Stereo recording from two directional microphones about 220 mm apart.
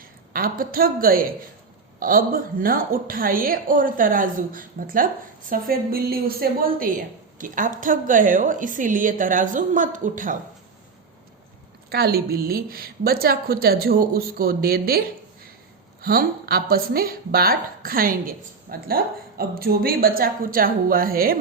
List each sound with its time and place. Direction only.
0.3 s a woman's voice: 40° right (ahead or behind)
11.9 s a woman's voice: 45° right (ahead or behind)